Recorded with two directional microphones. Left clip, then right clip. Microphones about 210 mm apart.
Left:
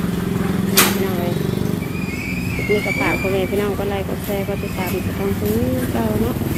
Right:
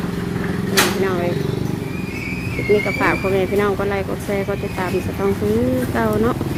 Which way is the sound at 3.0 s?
15° right (ahead or behind).